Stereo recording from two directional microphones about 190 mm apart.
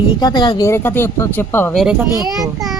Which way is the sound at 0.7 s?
10° left (ahead or behind).